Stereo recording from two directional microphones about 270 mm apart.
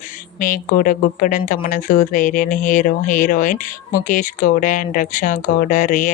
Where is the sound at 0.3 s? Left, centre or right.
Left.